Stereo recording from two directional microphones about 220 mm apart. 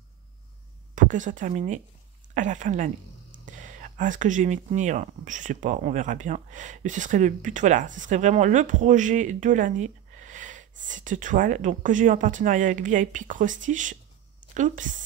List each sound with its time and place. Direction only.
0.9 s a woman's voice: 35° right (ahead or behind)